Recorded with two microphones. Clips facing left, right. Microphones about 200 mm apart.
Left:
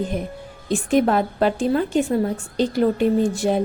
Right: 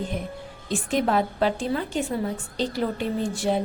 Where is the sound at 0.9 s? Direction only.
50° left (ahead or behind).